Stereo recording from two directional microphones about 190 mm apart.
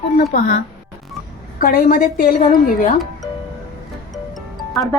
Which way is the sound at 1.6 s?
50° left (ahead or behind).